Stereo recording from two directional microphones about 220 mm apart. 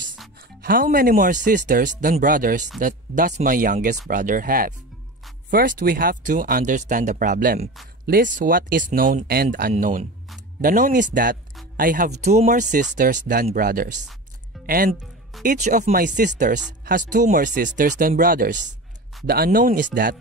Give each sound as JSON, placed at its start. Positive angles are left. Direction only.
{"t": 0.6, "sound": "speech", "side_deg": -40}
{"t": 15.4, "sound": "speech", "side_deg": -35}